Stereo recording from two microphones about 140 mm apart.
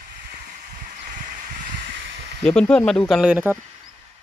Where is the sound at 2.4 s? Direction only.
5° left (ahead or behind).